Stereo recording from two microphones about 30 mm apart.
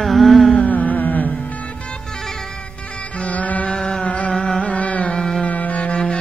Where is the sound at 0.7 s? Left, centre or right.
Left.